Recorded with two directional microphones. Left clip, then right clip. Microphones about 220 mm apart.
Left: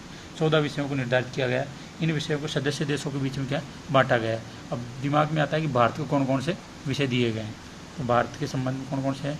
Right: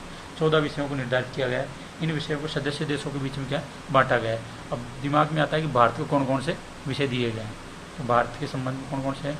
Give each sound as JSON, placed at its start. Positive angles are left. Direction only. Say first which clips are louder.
{"t": 0.3, "sound": "a man's voice", "louder": "right 1 dB", "side_deg": 35}